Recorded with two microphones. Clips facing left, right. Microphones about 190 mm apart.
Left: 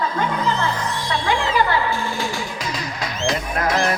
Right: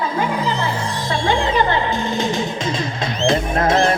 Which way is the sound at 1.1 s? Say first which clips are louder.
Right 3 dB; 25° right (ahead or behind).